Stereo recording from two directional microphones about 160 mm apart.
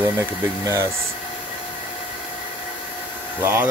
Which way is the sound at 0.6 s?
15° right (ahead or behind).